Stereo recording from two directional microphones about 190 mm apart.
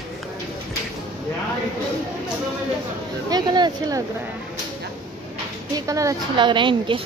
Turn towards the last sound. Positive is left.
turn(degrees=-25)  # may be behind; listen again after turning